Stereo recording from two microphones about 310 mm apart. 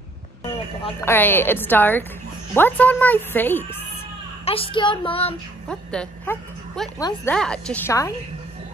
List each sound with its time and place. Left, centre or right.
0.4 s a sound: centre
1.0 s a woman's voice: centre
4.5 s a woman's voice: centre
5.7 s speech: centre